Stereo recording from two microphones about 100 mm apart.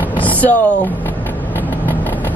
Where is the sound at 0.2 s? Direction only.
15° left (ahead or behind).